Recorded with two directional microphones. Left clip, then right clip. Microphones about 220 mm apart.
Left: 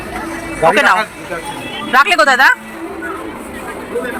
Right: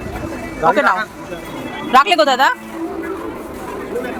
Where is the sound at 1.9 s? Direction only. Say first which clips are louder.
Left 2 dB; 15° right (ahead or behind).